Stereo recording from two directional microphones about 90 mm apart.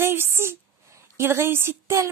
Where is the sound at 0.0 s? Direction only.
25° right (ahead or behind).